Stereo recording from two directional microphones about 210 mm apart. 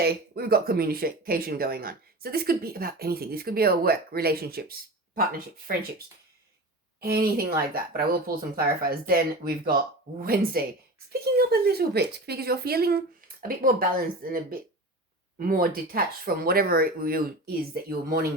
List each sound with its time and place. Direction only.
0.0 s speech: 45° right (ahead or behind)
7.0 s speech: 45° right (ahead or behind)